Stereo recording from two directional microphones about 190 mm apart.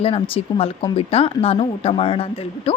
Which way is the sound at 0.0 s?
30° left (ahead or behind).